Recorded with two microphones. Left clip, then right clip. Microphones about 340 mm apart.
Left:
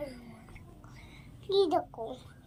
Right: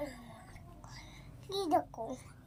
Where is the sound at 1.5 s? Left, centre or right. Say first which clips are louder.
Left 5 dB; centre.